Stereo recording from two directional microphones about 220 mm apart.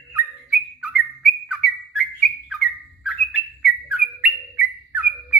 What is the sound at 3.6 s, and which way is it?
Bird, 5° right (ahead or behind).